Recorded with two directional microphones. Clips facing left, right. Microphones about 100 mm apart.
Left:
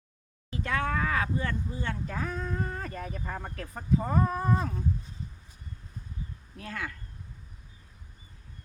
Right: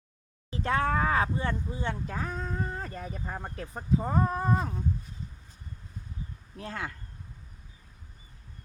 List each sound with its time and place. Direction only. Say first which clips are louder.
0.5 s speech: right 3 dB; 30° right (ahead or behind)
6.6 s speech: right 1 dB; 25° right (ahead or behind)